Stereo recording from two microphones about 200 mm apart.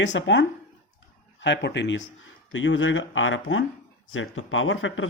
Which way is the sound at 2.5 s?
75° left (ahead or behind).